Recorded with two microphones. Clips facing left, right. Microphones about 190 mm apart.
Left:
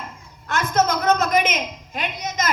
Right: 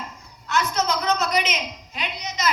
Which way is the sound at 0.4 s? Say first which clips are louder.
Left 3 dB; 50° left (ahead or behind).